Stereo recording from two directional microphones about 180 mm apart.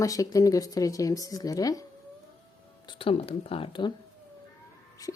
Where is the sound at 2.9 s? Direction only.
30° left (ahead or behind).